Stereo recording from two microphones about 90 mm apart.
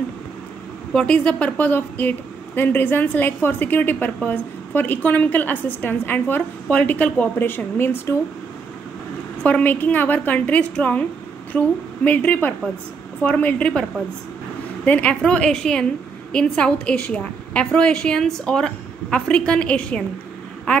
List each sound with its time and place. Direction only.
0.9 s a woman's voice: 10° left (ahead or behind)
9.4 s a woman's voice: 15° left (ahead or behind)
14.9 s a woman's voice: 15° left (ahead or behind)